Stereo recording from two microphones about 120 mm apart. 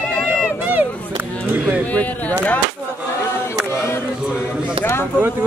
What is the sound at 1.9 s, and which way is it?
Speech, 10° left (ahead or behind).